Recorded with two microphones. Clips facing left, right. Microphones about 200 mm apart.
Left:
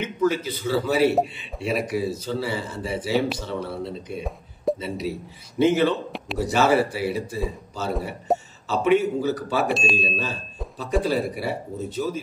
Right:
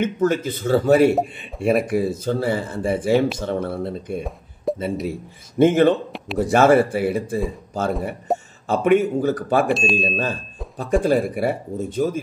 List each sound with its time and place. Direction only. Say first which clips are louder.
0.0 s speech: right 3 dB; 50° right (ahead or behind)
8.3 s a sound: left 1 dB; centre (ahead or behind)
8.6 s speech: right 3 dB; 50° right (ahead or behind)
9.7 s speech: right 4 dB; centre (ahead or behind)
9.9 s speech: right 4 dB; 50° right (ahead or behind)